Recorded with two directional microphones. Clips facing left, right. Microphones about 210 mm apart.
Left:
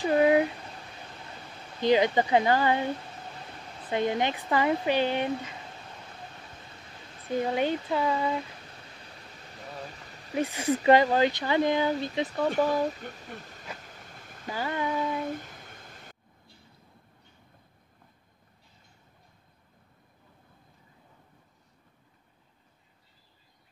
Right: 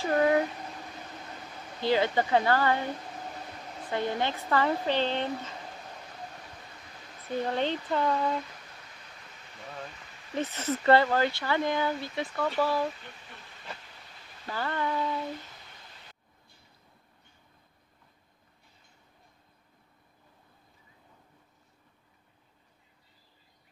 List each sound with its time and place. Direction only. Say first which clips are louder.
0.0 s a sound: left 3 dB; 15° left (ahead or behind)
1.8 s speech: left 3 dB; 15° left (ahead or behind)
3.9 s speech: left 3 dB; 20° left (ahead or behind)
7.2 s speech: left 2 dB; 10° left (ahead or behind)
10.3 s speech: left 4 dB; 10° left (ahead or behind)
12.3 s speech: left 2 dB; 40° left (ahead or behind)
13.7 s vehicle: left 5 dB; 45° left (ahead or behind)
14.4 s speech: left 1 dB; 15° left (ahead or behind)
15.1 s a sound: left 3 dB; 50° left (ahead or behind)